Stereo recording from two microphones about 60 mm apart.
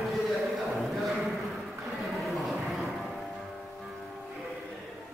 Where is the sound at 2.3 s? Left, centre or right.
Centre.